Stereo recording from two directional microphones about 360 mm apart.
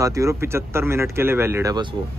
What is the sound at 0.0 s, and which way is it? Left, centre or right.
Speech, centre.